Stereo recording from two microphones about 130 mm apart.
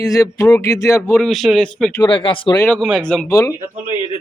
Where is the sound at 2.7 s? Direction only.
5° left (ahead or behind).